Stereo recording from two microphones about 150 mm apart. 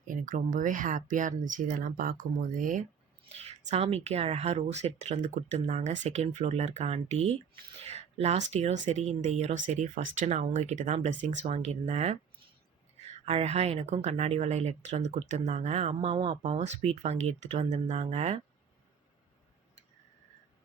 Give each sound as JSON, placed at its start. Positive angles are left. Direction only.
{"t": 0.1, "sound": "speech", "side_deg": -60}
{"t": 3.3, "sound": "speech", "side_deg": -45}
{"t": 13.2, "sound": "speech", "side_deg": -45}
{"t": 16.4, "sound": "speech", "side_deg": -50}